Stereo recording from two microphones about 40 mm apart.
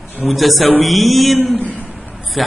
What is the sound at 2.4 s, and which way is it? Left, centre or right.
Speech, centre.